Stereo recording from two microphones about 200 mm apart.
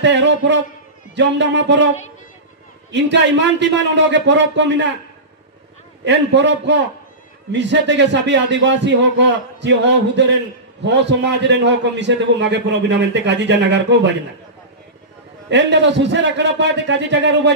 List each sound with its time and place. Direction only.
0.0 s a man's voice: 60° right (ahead or behind)
2.9 s a man's voice: 60° right (ahead or behind)
6.0 s a man's voice: 60° right (ahead or behind)
15.5 s a man's voice: 65° right (ahead or behind)